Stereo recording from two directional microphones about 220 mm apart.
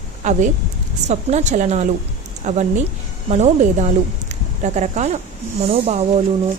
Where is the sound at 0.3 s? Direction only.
35° right (ahead or behind).